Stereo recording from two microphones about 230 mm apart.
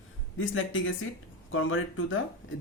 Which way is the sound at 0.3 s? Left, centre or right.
Left.